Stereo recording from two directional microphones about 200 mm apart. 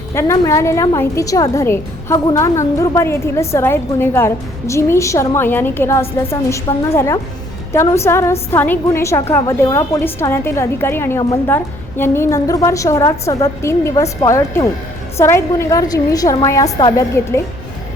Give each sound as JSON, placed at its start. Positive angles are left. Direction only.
{"t": 0.1, "sound": "a woman's voice", "side_deg": 15}